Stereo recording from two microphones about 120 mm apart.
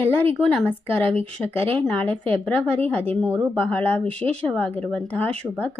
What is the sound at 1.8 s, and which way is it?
Speech, 5° left (ahead or behind).